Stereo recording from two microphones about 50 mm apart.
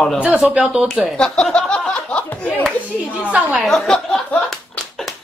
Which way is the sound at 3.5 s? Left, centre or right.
Centre.